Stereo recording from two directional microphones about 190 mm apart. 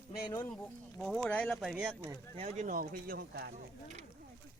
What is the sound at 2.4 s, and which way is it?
Speech, 35° right (ahead or behind).